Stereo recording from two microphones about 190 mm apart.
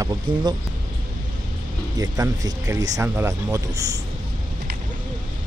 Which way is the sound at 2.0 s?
20° right (ahead or behind).